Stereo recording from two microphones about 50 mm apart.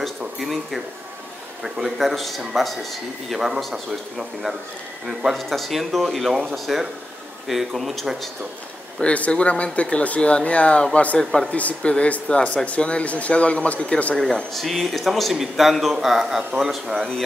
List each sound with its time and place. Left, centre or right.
0.4 s a man's voice: centre
9.0 s speech: left
11.5 s speech: left
14.1 s a man's voice: centre